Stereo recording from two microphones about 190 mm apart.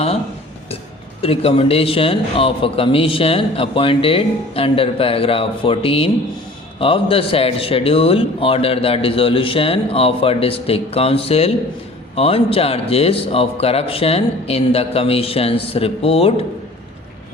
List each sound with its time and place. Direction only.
1.2 s a man's voice: 30° left (ahead or behind)